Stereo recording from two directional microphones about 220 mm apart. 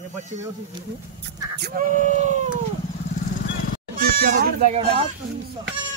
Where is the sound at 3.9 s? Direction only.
40° right (ahead or behind).